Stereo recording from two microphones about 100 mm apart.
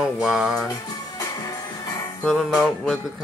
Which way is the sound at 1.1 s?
35° left (ahead or behind).